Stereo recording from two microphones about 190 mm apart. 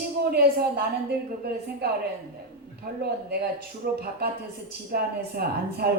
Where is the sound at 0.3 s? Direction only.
55° right (ahead or behind).